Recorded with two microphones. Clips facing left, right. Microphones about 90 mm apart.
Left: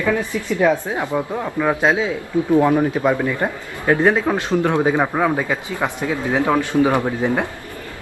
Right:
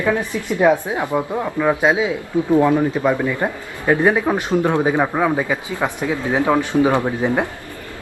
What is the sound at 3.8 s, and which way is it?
A man's voice, 15° right (ahead or behind).